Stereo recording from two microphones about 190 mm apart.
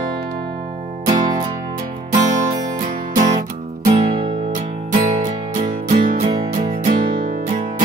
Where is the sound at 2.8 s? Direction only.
40° right (ahead or behind).